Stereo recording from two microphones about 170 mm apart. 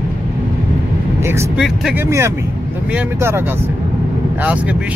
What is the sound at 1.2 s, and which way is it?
Speech, 15° right (ahead or behind).